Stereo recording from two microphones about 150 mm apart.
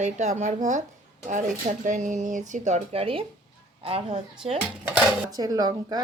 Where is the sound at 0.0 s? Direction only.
50° right (ahead or behind).